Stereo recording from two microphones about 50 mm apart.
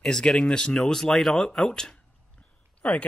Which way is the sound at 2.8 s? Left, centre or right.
Left.